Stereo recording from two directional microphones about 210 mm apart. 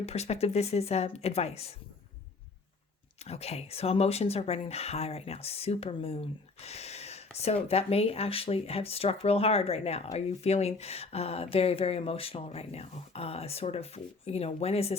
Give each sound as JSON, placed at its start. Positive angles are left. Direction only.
{"t": 0.0, "sound": "speech", "side_deg": 30}
{"t": 3.2, "sound": "speech", "side_deg": 30}